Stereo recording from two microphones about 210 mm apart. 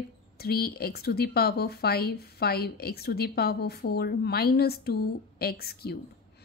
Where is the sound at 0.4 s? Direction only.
45° left (ahead or behind).